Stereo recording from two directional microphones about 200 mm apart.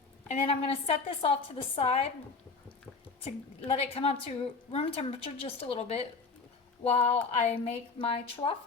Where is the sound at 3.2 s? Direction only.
30° left (ahead or behind).